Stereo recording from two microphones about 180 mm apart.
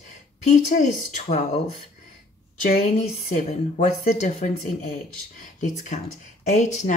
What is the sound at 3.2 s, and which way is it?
Speech, 40° left (ahead or behind).